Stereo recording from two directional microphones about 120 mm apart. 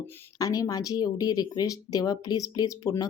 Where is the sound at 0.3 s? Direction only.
30° left (ahead or behind).